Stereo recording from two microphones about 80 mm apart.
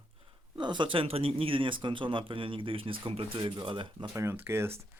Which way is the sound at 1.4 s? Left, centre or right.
Right.